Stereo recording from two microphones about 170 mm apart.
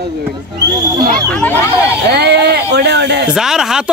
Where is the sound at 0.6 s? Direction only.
25° right (ahead or behind).